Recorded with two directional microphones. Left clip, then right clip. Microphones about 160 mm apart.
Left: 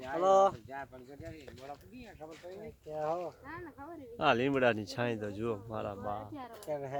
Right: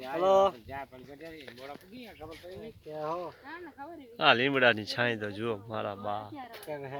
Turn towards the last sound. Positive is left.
turn(degrees=0)  # may be behind; listen again after turning